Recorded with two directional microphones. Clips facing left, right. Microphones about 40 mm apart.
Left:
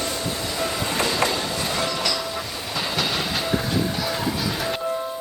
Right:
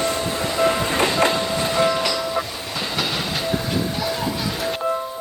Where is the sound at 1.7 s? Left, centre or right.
Centre.